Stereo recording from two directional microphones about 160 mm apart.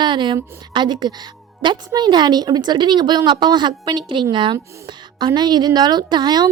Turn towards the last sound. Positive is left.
turn(degrees=-25)  # may be behind; listen again after turning